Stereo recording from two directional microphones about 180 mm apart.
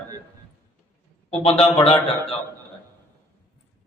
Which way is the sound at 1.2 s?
35° left (ahead or behind).